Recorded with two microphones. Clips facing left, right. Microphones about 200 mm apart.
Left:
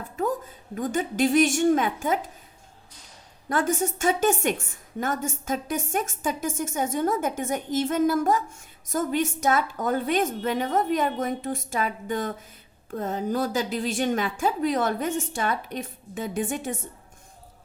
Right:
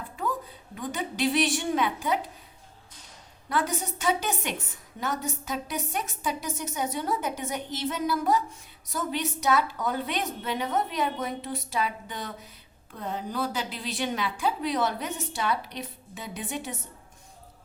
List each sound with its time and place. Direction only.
0.8 s a woman's voice: 45° left (ahead or behind)
3.5 s a woman's voice: 45° left (ahead or behind)